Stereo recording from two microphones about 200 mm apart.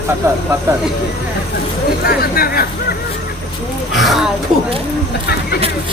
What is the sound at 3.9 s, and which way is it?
Speech, centre (ahead or behind).